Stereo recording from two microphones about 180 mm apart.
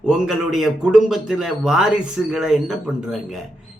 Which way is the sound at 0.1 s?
Centre (ahead or behind).